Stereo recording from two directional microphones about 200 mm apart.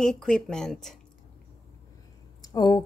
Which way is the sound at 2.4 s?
20° left (ahead or behind).